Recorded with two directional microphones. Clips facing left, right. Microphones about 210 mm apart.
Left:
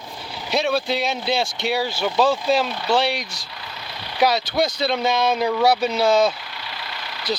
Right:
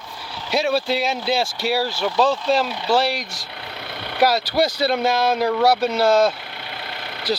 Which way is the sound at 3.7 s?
55° right (ahead or behind).